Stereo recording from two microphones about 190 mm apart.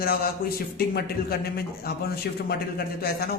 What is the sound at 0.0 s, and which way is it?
A man's voice, 50° left (ahead or behind).